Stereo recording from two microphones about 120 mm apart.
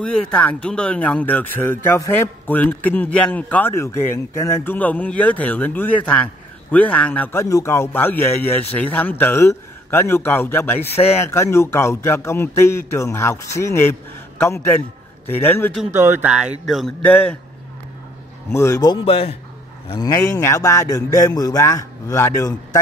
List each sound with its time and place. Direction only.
0.0 s a man's voice: 5° left (ahead or behind)
7.4 s a man's voice: 25° left (ahead or behind)
10.9 s speech: 60° left (ahead or behind)
11.1 s a man's voice: 20° left (ahead or behind)
15.9 s speech: 20° right (ahead or behind); by 16.9 s centre (ahead or behind)
17.0 s a man's voice: 10° left (ahead or behind)
18.5 s a man's voice: 25° left (ahead or behind)
19.0 s a man's voice: 50° left (ahead or behind)
20.0 s a man's voice: 30° left (ahead or behind)